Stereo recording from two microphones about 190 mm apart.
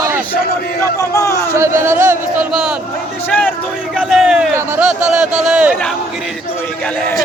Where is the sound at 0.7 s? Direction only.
15° left (ahead or behind).